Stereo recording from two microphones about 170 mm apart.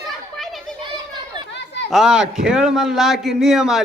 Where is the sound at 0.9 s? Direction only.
25° right (ahead or behind).